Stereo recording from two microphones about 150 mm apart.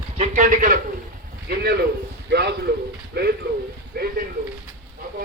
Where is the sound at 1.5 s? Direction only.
90° right.